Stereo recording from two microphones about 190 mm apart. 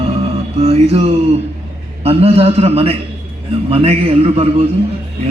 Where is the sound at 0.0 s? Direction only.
30° right (ahead or behind).